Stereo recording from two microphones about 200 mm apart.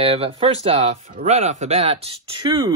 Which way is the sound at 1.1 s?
45° right (ahead or behind).